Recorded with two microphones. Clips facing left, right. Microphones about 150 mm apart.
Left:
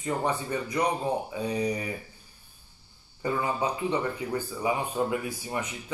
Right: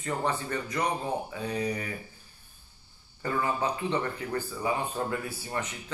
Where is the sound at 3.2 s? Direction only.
15° left (ahead or behind).